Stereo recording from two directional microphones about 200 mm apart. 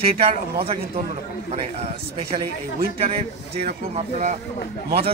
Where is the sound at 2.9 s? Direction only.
30° right (ahead or behind).